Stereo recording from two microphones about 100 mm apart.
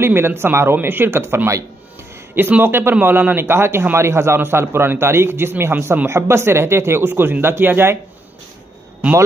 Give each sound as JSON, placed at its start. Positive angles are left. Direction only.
{"t": 0.0, "sound": "a man's voice", "side_deg": -25}